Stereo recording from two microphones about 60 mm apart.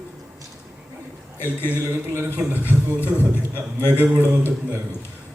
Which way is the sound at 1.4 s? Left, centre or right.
Left.